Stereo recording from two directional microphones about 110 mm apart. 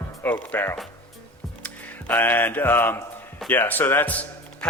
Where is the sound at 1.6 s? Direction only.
15° left (ahead or behind).